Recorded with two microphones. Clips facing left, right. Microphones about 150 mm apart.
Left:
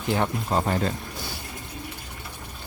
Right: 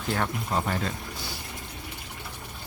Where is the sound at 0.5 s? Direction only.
35° left (ahead or behind).